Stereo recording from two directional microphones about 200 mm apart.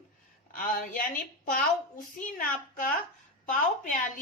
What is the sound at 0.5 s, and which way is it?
A woman's voice, 45° left (ahead or behind).